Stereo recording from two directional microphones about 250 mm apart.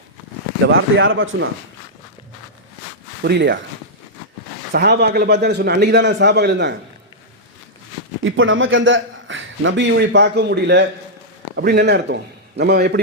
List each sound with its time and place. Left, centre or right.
0.7 s a man's voice: right
3.2 s a man's voice: right
4.7 s a man's voice: right
8.2 s a man's voice: right